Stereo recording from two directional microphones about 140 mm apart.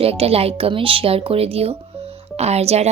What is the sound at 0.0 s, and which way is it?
Speech, 45° right (ahead or behind).